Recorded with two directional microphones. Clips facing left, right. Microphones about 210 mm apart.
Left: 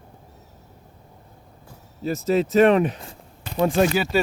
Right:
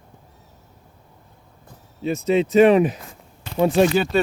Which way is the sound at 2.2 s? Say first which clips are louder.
Right 2 dB; centre (ahead or behind).